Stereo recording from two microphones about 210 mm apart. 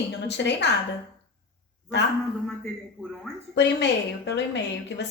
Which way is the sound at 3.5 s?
55° left (ahead or behind).